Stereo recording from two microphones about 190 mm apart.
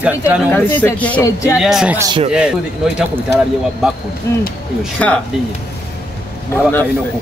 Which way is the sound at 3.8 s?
Centre (ahead or behind).